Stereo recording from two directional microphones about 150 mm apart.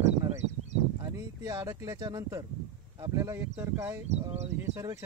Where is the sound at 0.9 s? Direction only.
25° right (ahead or behind).